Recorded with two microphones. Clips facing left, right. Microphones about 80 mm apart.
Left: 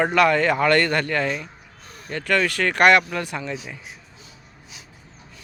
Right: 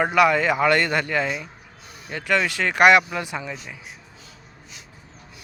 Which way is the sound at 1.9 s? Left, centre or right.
Centre.